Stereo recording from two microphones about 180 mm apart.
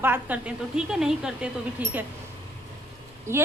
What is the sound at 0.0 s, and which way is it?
A woman's voice, 10° right (ahead or behind).